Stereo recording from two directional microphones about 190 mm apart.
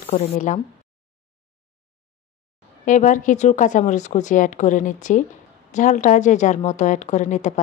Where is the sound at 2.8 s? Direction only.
40° left (ahead or behind).